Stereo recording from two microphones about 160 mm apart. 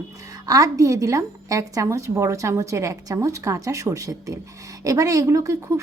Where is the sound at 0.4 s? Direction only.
25° right (ahead or behind).